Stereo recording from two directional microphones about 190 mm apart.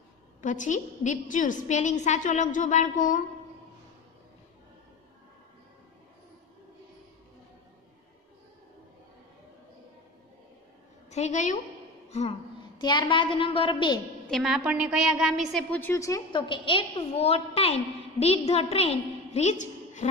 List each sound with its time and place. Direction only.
0.4 s a woman's voice: 40° left (ahead or behind)
11.1 s a woman's voice: 35° left (ahead or behind)
12.7 s a woman's voice: 25° left (ahead or behind)
14.3 s a woman's voice: centre (ahead or behind); by 20.1 s 40° left (ahead or behind)